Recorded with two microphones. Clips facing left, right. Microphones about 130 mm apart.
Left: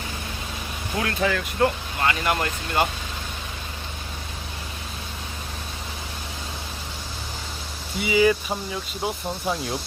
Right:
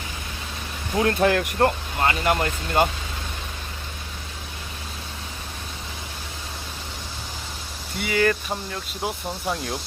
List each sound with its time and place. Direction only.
1.2 s speech: 55° right (ahead or behind)
2.0 s speech: 35° right (ahead or behind)
7.9 s speech: 5° left (ahead or behind)